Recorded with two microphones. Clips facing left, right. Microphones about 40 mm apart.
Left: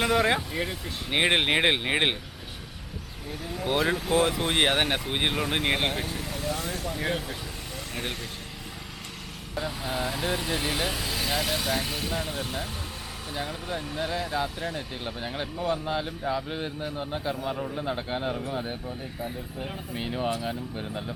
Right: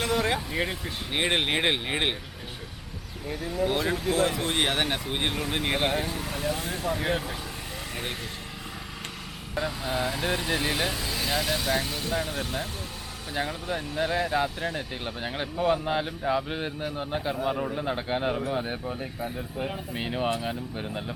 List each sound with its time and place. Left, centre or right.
0.0 s speech: centre
0.5 s speech: centre
1.1 s speech: centre
3.4 s speech: centre
6.0 s vehicle: centre
6.7 s vehicle: right
6.9 s speech: centre
9.6 s speech: centre
12.1 s speech: centre
18.7 s speech: right
19.6 s speech: centre